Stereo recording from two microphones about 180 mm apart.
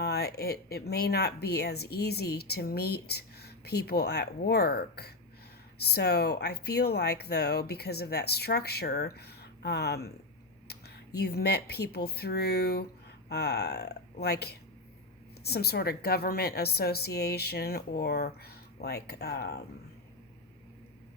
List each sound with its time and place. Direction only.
0.0 s speech: 65° left (ahead or behind)